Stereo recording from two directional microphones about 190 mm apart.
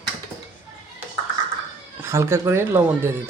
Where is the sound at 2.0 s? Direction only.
15° right (ahead or behind).